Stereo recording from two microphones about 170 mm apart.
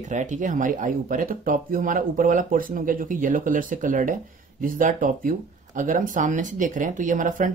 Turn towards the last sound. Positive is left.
turn(degrees=-50)  # may be behind; listen again after turning